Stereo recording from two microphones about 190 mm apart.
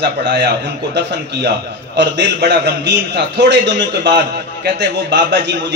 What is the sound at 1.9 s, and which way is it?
A man's voice, 65° right (ahead or behind).